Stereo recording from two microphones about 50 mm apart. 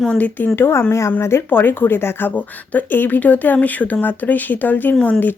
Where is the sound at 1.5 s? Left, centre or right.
Left.